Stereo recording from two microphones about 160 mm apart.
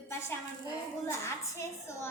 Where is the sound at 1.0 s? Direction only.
15° left (ahead or behind).